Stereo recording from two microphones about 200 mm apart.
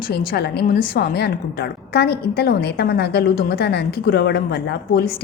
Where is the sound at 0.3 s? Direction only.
55° left (ahead or behind).